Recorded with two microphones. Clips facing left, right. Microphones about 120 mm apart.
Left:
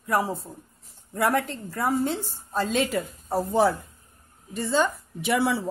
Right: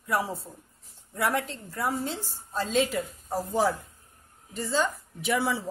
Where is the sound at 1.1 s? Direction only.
55° left (ahead or behind); by 5.6 s 70° left (ahead or behind).